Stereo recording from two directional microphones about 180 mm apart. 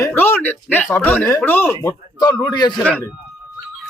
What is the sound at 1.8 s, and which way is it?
Speech, 25° left (ahead or behind).